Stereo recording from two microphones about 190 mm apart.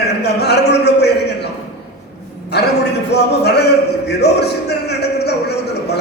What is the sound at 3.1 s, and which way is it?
Music, 60° left (ahead or behind).